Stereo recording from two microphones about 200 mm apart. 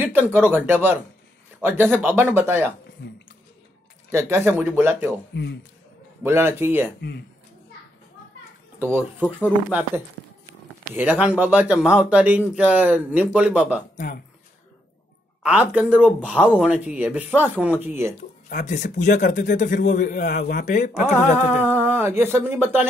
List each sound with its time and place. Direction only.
0.0 s speech: 10° right (ahead or behind)
4.1 s speech: 15° right (ahead or behind)
5.3 s a man's voice: 60° left (ahead or behind)
6.2 s speech: 10° right (ahead or behind)
7.0 s a man's voice: 55° left (ahead or behind)
8.7 s speech: 10° right (ahead or behind)
13.9 s speech: 45° left (ahead or behind)
15.4 s speech: 5° right (ahead or behind)
18.5 s a man's voice: 40° left (ahead or behind)
21.6 s speech: 10° right (ahead or behind)